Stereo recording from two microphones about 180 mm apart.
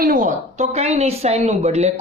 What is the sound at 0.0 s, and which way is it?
Speech, 50° right (ahead or behind).